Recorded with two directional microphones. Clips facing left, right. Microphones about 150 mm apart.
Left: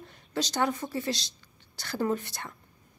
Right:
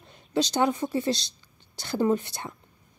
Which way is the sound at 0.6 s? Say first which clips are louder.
Right 4 dB; 15° right (ahead or behind).